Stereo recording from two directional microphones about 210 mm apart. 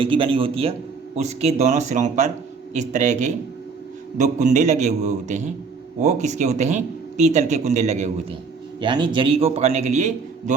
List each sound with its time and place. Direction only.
0.0 s a man's voice: 25° right (ahead or behind)
8.8 s a man's voice: 20° right (ahead or behind)